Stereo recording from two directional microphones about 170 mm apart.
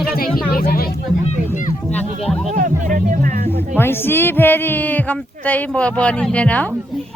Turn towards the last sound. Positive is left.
turn(degrees=10)  # may be behind; listen again after turning